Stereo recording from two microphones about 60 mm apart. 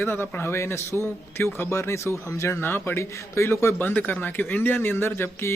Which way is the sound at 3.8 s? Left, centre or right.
Left.